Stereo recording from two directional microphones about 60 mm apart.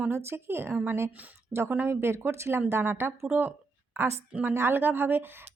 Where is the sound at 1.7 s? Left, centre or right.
Right.